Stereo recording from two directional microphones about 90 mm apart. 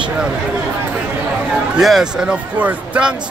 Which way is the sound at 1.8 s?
5° right (ahead or behind).